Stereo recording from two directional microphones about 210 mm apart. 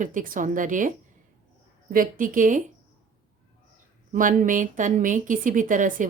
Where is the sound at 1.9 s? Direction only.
40° right (ahead or behind).